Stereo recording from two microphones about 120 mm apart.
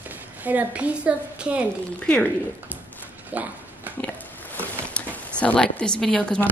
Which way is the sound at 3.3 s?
10° right (ahead or behind).